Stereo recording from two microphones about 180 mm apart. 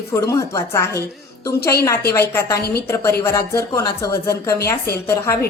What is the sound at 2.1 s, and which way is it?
Speech, 15° left (ahead or behind).